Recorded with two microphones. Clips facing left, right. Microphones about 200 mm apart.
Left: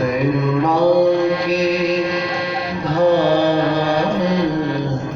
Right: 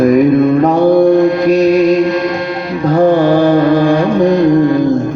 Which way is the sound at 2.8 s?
50° right (ahead or behind).